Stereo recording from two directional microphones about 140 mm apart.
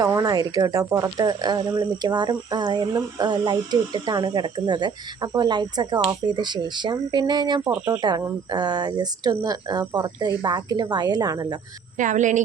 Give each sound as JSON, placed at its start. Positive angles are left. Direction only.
{"t": 0.0, "sound": "speech", "side_deg": -25}
{"t": 11.9, "sound": "speech", "side_deg": -65}